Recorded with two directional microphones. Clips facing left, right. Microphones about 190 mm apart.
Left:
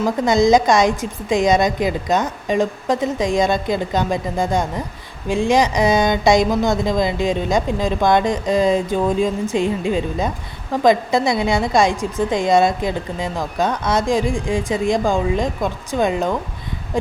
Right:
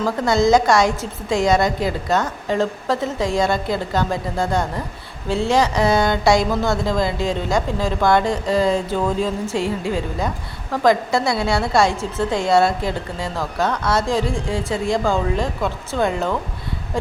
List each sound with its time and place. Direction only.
0.0 s speech: 15° left (ahead or behind)